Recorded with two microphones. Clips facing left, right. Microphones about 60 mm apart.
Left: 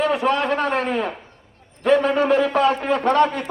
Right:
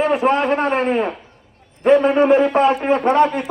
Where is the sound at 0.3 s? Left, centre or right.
Right.